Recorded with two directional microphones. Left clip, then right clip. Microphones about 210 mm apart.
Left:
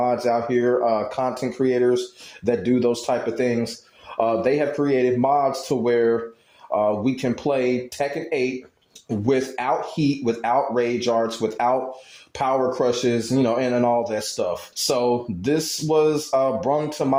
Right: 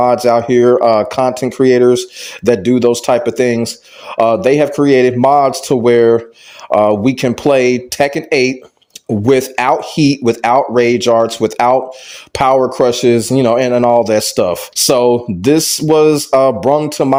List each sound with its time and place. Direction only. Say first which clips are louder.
0.0 s speech: right 10 dB; 40° right (ahead or behind)